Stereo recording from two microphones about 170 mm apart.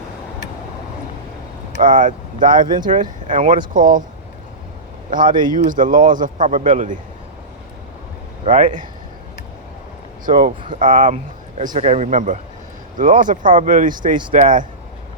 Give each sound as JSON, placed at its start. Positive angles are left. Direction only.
{"t": 1.8, "sound": "speech", "side_deg": -50}
{"t": 5.2, "sound": "a man's voice", "side_deg": -25}
{"t": 5.5, "sound": "speech", "side_deg": -50}
{"t": 8.4, "sound": "speech", "side_deg": -45}
{"t": 10.2, "sound": "speech", "side_deg": -55}
{"t": 14.2, "sound": "a man's voice", "side_deg": -30}
{"t": 14.4, "sound": "speech", "side_deg": -50}